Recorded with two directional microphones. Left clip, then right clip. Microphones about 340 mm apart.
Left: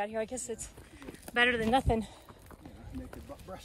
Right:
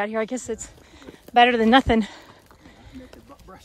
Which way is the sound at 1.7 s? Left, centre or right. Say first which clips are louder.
Right 11 dB; right.